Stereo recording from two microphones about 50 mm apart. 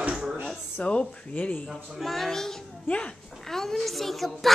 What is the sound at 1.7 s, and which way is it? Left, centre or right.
A child's voice, centre.